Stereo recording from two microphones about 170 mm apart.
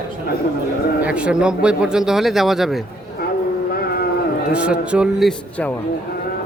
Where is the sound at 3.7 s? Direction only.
65° left (ahead or behind).